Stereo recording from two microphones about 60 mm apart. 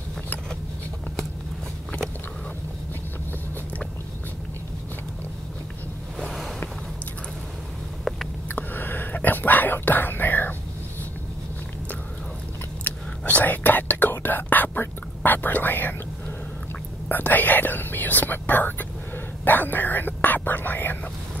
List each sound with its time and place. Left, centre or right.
6.2 s a sound: centre
8.5 s whispering: left
12.8 s whispering: left
17.1 s whispering: left